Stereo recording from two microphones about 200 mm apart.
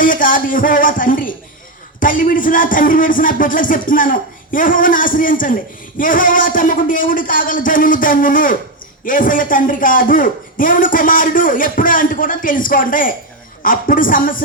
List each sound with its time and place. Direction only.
0.0 s a woman's voice: 45° left (ahead or behind)